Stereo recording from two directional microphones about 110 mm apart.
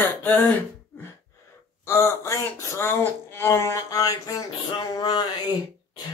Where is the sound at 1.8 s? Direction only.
25° left (ahead or behind).